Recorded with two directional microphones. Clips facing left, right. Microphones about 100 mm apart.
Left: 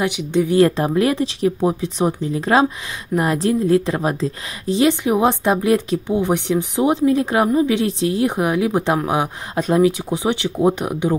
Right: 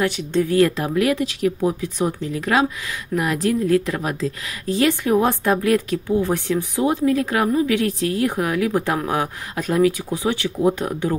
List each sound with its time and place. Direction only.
0.0 s speech: 15° left (ahead or behind)
0.6 s a woman's voice: 30° left (ahead or behind)